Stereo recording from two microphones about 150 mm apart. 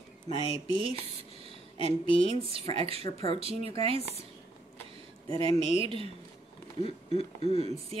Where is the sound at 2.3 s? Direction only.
40° right (ahead or behind).